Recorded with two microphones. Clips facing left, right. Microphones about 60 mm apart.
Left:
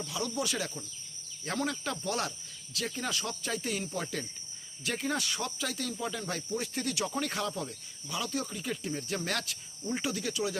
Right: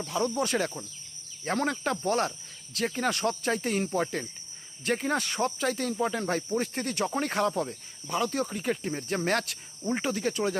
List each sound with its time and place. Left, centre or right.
0.2 s speech: right
2.7 s speech: right